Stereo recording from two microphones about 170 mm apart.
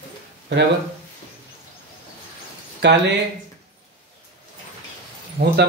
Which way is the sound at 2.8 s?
90° right.